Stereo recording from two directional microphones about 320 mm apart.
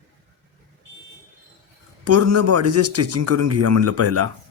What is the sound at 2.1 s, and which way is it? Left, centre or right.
Speech, right.